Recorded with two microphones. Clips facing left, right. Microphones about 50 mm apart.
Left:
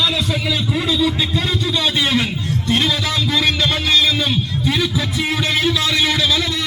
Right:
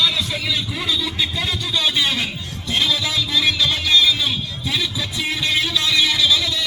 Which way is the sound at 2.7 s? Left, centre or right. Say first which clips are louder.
Left 2 dB; left.